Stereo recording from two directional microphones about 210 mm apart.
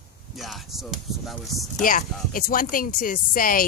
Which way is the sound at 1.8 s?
40° left (ahead or behind).